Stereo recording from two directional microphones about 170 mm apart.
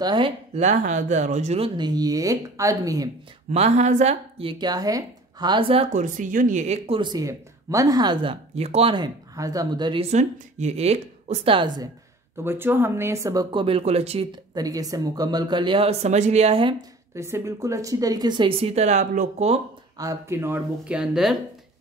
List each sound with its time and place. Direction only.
0.0 s speech: 25° right (ahead or behind)
0.6 s speech: 45° right (ahead or behind)
1.8 s speech: 25° right (ahead or behind)
3.5 s speech: 40° right (ahead or behind)
6.0 s speech: 50° right (ahead or behind)
7.0 s speech: 20° right (ahead or behind)
10.1 s speech: 40° right (ahead or behind); by 11.9 s 25° right (ahead or behind)
12.4 s speech: 15° right (ahead or behind); by 14.2 s 35° right (ahead or behind)
14.5 s speech: 20° right (ahead or behind)
17.1 s speech: 15° right (ahead or behind); by 19.6 s 40° right (ahead or behind)
20.0 s speech: 15° right (ahead or behind)